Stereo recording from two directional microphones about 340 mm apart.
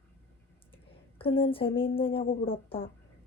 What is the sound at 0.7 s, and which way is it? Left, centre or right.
Speech, centre.